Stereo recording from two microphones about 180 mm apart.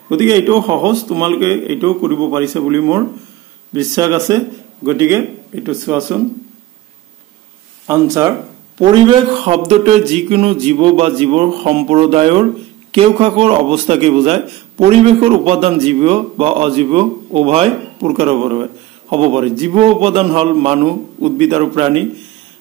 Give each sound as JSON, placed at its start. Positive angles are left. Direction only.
{"t": 0.1, "sound": "a man's voice", "side_deg": -20}
{"t": 7.8, "sound": "speech", "side_deg": -15}
{"t": 8.7, "sound": "a man's voice", "side_deg": -25}